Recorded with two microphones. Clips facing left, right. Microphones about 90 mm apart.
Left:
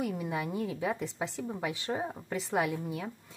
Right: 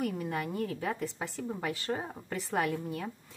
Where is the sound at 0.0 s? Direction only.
15° left (ahead or behind).